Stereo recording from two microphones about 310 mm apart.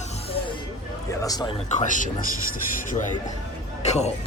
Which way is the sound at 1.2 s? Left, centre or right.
Centre.